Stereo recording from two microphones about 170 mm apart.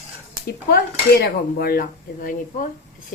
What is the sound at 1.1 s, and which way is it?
Speech, 65° left (ahead or behind).